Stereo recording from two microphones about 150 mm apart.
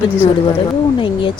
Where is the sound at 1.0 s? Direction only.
35° left (ahead or behind).